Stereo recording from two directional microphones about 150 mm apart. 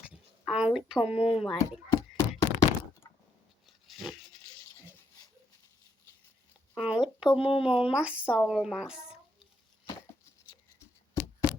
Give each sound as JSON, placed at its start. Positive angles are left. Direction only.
{"t": 0.1, "sound": "speech", "side_deg": -5}
{"t": 1.5, "sound": "thunk", "side_deg": 20}
{"t": 3.8, "sound": "pig", "side_deg": 0}
{"t": 6.7, "sound": "speech", "side_deg": -5}
{"t": 7.3, "sound": "speech", "side_deg": 35}
{"t": 7.8, "sound": "a woman's voice", "side_deg": -5}
{"t": 10.5, "sound": "a sound", "side_deg": 20}